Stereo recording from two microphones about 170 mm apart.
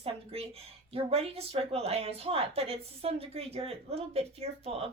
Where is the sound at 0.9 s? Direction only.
35° right (ahead or behind).